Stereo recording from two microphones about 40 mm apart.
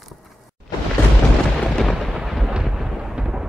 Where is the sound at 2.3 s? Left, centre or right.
Centre.